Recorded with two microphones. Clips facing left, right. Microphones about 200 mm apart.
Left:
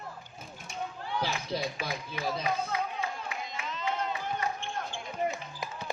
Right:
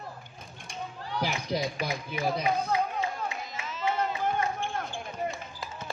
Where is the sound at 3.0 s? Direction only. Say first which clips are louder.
Right 4 dB; 40° right (ahead or behind).